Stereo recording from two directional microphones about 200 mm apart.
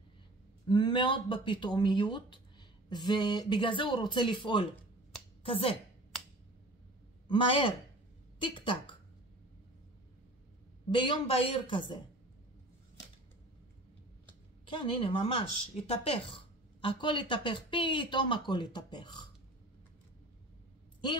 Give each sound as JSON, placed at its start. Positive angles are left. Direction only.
{"t": 0.7, "sound": "speech", "side_deg": 25}
{"t": 7.2, "sound": "speech", "side_deg": 25}
{"t": 10.9, "sound": "speech", "side_deg": 25}
{"t": 14.7, "sound": "speech", "side_deg": 25}